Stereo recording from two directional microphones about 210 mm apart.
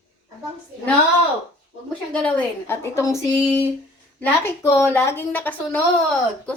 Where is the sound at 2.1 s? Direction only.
5° left (ahead or behind).